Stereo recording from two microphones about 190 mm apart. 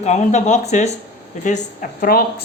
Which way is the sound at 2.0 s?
50° left (ahead or behind).